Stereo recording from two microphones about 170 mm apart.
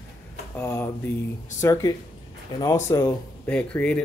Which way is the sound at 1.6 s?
20° left (ahead or behind).